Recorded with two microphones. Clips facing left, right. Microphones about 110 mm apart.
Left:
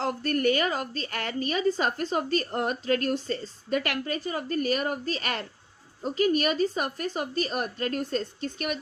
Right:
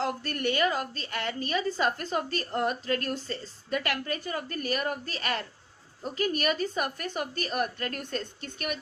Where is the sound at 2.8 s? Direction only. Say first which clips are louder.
Left 4 dB; 40° right (ahead or behind).